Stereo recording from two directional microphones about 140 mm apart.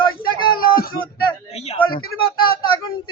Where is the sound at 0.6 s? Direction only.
90° left.